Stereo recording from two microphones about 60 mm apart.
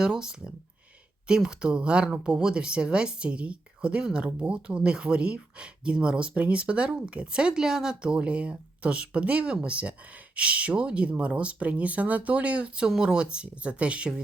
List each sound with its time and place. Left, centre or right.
0.0 s speech: centre